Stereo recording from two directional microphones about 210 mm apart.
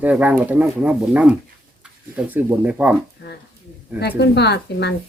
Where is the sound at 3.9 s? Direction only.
50° left (ahead or behind).